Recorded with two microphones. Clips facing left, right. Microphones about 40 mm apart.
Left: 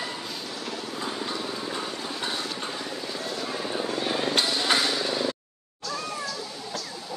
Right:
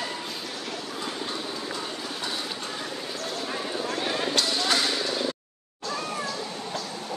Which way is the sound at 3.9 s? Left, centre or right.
Centre.